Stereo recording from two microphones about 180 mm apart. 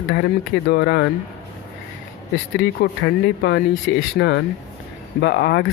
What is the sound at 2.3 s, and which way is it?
Speech, 85° left.